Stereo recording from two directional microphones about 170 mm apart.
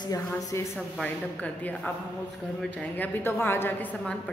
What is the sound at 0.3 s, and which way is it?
Speech, 20° left (ahead or behind).